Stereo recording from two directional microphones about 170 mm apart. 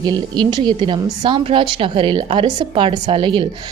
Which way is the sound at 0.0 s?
25° right (ahead or behind).